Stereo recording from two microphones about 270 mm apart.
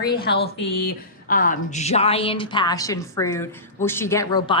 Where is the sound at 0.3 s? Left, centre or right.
Left.